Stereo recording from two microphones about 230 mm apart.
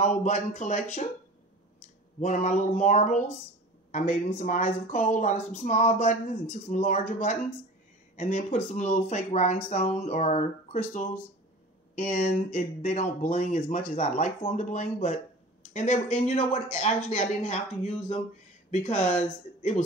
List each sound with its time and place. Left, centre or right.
0.2 s speech: left
2.1 s speech: left